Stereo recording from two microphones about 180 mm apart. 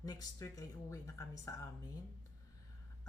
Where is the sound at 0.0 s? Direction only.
20° left (ahead or behind).